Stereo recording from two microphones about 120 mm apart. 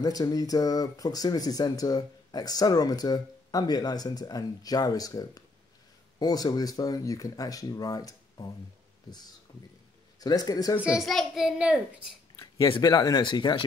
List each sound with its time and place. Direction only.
0.0 s speech: 30° left (ahead or behind)
10.2 s speech: 30° left (ahead or behind)
10.8 s a child's voice: 5° right (ahead or behind)
12.6 s speech: 40° left (ahead or behind)